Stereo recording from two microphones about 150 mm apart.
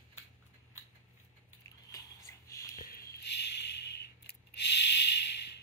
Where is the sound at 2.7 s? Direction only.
75° left (ahead or behind).